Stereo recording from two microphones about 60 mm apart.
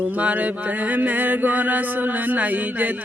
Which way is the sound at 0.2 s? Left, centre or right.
Right.